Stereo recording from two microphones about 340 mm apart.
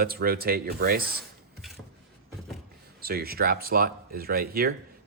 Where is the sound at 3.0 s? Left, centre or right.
Right.